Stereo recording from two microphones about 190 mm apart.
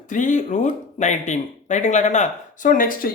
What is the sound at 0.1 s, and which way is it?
Speech, 40° left (ahead or behind).